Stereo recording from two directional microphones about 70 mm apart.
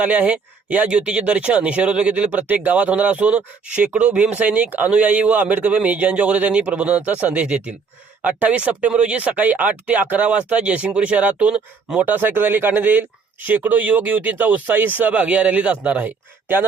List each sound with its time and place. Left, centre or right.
0.0 s speech: centre